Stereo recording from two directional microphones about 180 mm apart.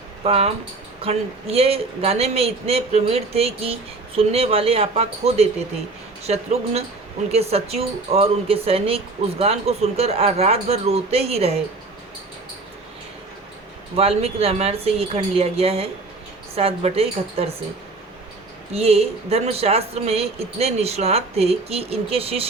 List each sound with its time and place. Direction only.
0.3 s a man's voice: 35° right (ahead or behind)
13.9 s a man's voice: 35° right (ahead or behind)
18.7 s a man's voice: 35° right (ahead or behind)